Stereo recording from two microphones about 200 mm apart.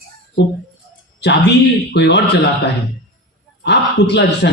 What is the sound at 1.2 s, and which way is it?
A man's voice, 55° left (ahead or behind).